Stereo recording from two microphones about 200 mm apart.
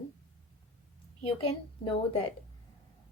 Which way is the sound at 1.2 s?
25° left (ahead or behind).